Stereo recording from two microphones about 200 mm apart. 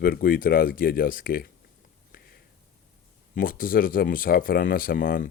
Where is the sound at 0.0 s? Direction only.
45° left (ahead or behind).